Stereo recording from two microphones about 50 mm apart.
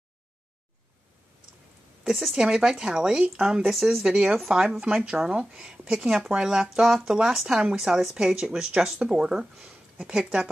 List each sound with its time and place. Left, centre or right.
2.3 s speech: centre
3.6 s speech: centre